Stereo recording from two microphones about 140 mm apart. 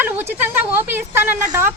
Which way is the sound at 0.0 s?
15° right (ahead or behind).